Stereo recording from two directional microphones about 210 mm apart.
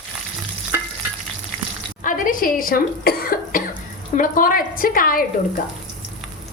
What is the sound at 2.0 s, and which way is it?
A woman's voice, 40° left (ahead or behind).